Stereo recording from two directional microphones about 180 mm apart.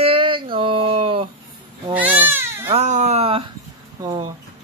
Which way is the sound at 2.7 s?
40° right (ahead or behind).